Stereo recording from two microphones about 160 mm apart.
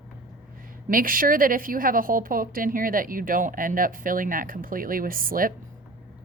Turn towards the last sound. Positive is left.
turn(degrees=-60)  # may be behind; listen again after turning